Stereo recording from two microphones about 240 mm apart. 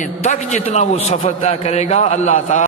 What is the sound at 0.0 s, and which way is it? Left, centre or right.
A man's voice, left.